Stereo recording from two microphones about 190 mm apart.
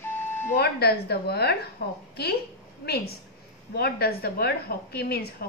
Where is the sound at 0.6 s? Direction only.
55° left (ahead or behind).